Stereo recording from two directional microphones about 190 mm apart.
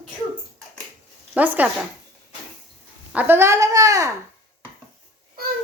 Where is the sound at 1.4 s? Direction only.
10° right (ahead or behind).